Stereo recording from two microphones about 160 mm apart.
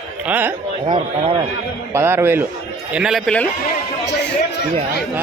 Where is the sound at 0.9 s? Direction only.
30° right (ahead or behind).